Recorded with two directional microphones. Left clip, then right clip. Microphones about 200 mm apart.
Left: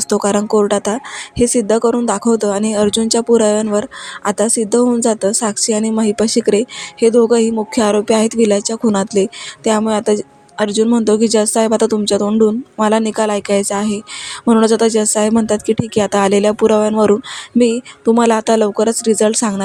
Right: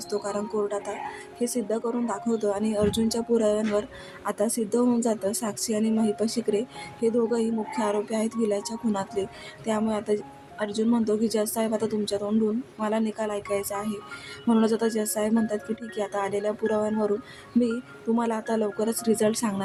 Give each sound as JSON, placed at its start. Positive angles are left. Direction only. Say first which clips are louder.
{"t": 0.1, "sound": "speech", "louder": "left 14 dB", "side_deg": 40}
{"t": 18.2, "sound": "speech", "louder": "left 15 dB", "side_deg": 40}